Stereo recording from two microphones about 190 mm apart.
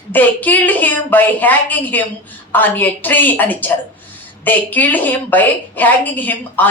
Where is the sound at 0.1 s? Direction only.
10° left (ahead or behind).